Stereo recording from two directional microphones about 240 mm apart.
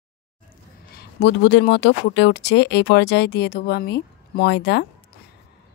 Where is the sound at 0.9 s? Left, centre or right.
Left.